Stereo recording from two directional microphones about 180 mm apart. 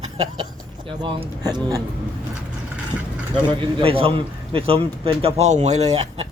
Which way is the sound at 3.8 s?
30° right (ahead or behind).